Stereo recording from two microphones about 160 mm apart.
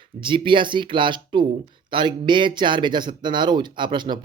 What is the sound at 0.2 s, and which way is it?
Speech, 30° right (ahead or behind).